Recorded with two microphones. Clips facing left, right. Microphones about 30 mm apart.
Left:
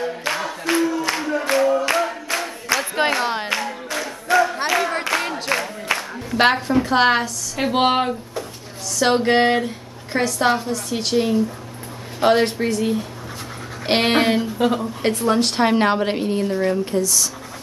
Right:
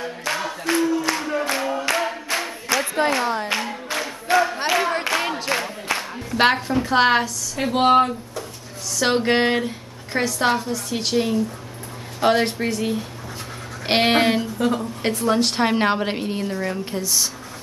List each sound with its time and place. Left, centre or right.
0.3 s music: centre
1.3 s a sound: centre
3.0 s a sound: left
3.4 s clapping: centre
4.6 s a sound: centre
6.3 s a woman's voice: centre
7.5 s speech: centre
9.0 s a woman's voice: centre
14.6 s a woman's voice: centre
15.0 s a woman's voice: centre
17.0 s speech: right